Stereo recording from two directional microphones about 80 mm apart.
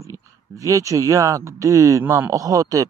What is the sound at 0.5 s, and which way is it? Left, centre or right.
Speech, right.